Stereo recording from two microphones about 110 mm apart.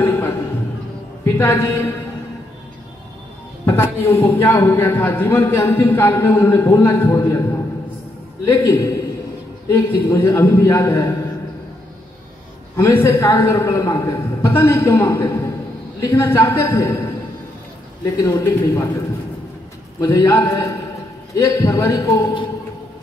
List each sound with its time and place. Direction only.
0.0 s music: 20° left (ahead or behind)
1.2 s a woman's voice: 25° left (ahead or behind)
3.6 s a man's voice: 25° left (ahead or behind)
12.7 s a man's voice: 25° left (ahead or behind)
20.2 s a man's voice: 25° left (ahead or behind)